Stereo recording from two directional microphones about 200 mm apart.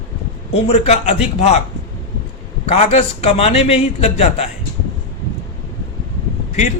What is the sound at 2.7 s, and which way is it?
A man's voice, 30° left (ahead or behind).